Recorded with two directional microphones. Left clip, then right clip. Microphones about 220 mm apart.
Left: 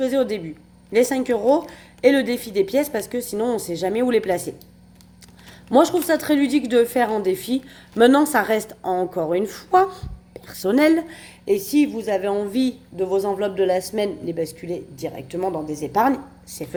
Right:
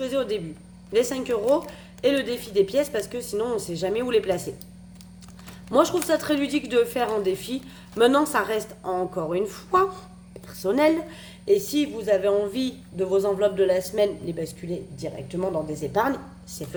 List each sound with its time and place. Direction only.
0.0 s a woman's voice: 30° left (ahead or behind)
5.7 s a woman's voice: 30° left (ahead or behind)